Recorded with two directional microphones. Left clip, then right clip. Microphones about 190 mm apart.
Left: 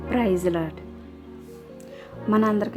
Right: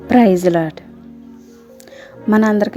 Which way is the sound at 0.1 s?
30° right (ahead or behind).